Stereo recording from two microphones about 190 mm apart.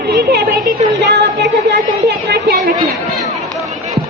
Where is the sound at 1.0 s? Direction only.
60° right (ahead or behind).